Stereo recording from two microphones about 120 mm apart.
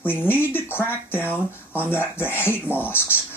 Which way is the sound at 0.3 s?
15° left (ahead or behind).